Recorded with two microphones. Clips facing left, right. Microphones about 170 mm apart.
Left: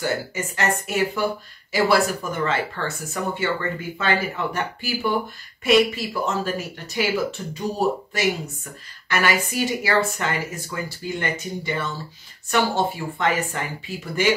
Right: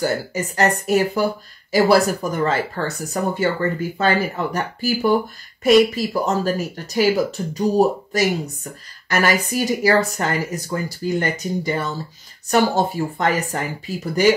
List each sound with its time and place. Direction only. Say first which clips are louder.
0.0 s speech: right 4 dB; 40° right (ahead or behind)